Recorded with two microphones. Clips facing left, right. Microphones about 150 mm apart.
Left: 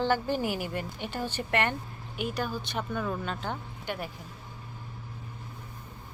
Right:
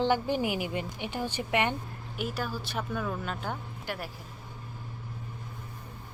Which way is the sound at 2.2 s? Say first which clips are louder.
Left 2 dB; centre (ahead or behind).